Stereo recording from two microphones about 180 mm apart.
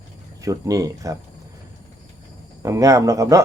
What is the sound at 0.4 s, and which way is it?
Speech, 20° right (ahead or behind).